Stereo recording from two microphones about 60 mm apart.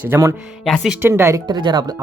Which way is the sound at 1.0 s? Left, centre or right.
Right.